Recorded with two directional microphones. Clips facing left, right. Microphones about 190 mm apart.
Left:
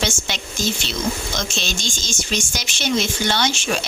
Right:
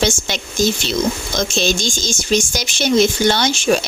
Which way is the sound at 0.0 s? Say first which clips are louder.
Right 6 dB; 40° right (ahead or behind).